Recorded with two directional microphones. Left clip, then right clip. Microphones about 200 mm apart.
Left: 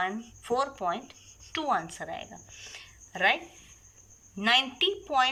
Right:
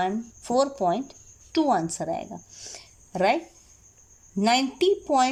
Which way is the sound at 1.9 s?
55° right (ahead or behind).